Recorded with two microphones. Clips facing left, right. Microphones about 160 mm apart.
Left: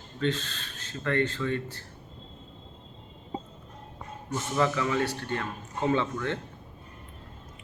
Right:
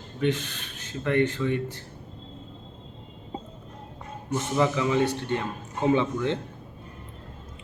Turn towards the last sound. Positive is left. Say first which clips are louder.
# right 4 dB
turn(degrees=-15)  # may be behind; listen again after turning